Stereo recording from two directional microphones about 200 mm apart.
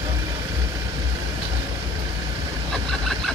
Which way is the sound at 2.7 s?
Centre (ahead or behind).